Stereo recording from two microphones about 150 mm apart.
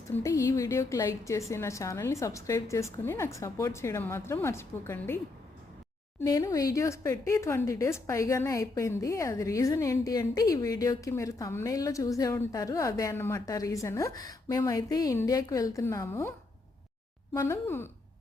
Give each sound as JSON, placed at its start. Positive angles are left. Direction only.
{"t": 0.2, "sound": "speech", "side_deg": 20}
{"t": 6.2, "sound": "speech", "side_deg": 25}
{"t": 17.3, "sound": "speech", "side_deg": 15}